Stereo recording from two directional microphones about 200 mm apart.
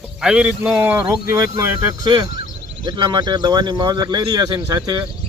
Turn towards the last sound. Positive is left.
turn(degrees=-20)  # may be behind; listen again after turning